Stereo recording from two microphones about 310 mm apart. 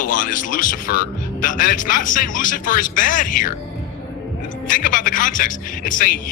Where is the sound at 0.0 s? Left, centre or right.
Left.